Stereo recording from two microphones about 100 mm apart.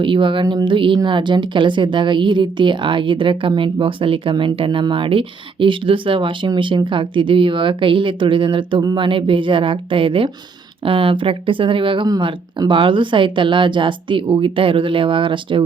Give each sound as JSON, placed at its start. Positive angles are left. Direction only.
{"t": 0.0, "sound": "speech", "side_deg": -55}